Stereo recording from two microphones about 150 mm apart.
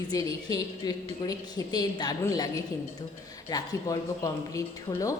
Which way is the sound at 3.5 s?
20° left (ahead or behind).